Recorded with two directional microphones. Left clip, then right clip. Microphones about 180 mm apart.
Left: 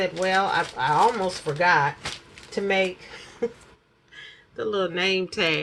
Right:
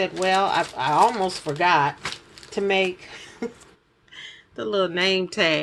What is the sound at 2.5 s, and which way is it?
Speech, 60° right (ahead or behind).